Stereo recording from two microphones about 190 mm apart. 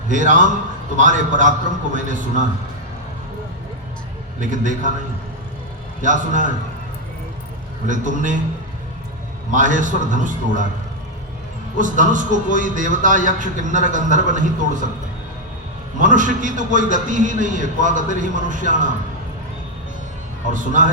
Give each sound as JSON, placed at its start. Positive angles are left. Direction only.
{"t": 0.1, "sound": "a man's voice", "side_deg": -40}
{"t": 4.4, "sound": "a man's voice", "side_deg": -40}
{"t": 6.0, "sound": "a man's voice", "side_deg": -40}
{"t": 7.9, "sound": "a man's voice", "side_deg": -40}
{"t": 9.5, "sound": "a man's voice", "side_deg": -40}
{"t": 11.8, "sound": "a man's voice", "side_deg": -40}
{"t": 16.0, "sound": "a man's voice", "side_deg": -45}
{"t": 20.5, "sound": "a man's voice", "side_deg": -40}